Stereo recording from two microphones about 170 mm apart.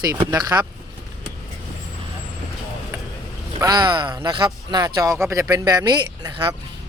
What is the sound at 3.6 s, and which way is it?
Speech, 25° right (ahead or behind).